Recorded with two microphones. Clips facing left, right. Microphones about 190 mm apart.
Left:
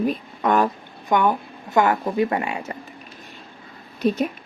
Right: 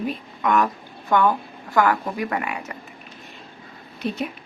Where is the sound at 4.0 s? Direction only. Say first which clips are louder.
Left 6 dB; 40° left (ahead or behind).